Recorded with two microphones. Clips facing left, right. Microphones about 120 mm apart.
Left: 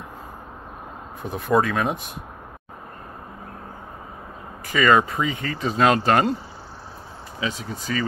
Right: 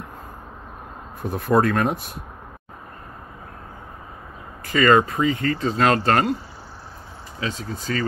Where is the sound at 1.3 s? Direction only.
Centre (ahead or behind).